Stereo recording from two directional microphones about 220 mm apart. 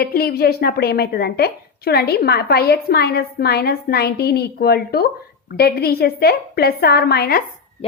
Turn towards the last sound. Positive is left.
turn(degrees=25)  # may be behind; listen again after turning